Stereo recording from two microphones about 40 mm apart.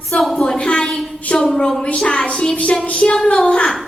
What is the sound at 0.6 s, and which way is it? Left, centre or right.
Speech, left.